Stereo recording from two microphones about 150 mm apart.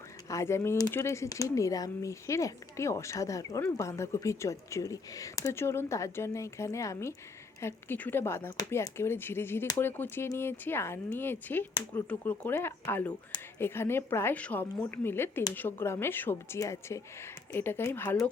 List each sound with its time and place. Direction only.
0.3 s a woman's voice: 20° left (ahead or behind)